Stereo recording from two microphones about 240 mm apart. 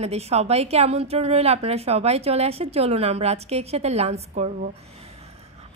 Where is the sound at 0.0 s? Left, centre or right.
Right.